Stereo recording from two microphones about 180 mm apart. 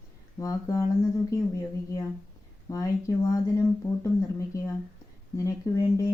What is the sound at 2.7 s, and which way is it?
Speech, 20° left (ahead or behind).